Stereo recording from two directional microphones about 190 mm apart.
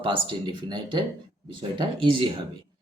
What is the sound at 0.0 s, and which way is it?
Speech, 25° right (ahead or behind).